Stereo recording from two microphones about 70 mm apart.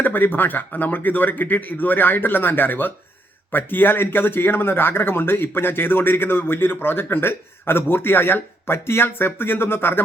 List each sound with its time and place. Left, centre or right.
0.0 s speech: left